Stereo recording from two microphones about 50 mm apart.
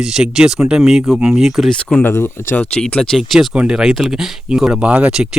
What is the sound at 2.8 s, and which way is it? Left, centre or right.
Speech, centre.